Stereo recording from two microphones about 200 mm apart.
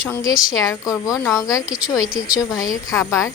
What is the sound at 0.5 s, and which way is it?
A woman's voice, 15° left (ahead or behind).